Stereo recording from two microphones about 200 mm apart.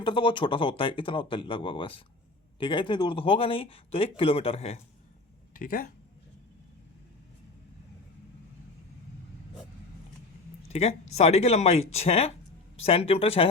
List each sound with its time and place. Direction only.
0.0 s speech: 25° left (ahead or behind)
5.5 s speech: 45° left (ahead or behind)
10.7 s speech: 30° left (ahead or behind)